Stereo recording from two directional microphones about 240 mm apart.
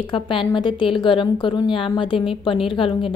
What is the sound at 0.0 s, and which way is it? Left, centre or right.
A woman's voice, left.